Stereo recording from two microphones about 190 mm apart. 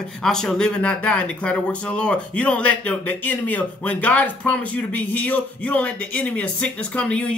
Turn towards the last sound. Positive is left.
turn(degrees=5)  # may be behind; listen again after turning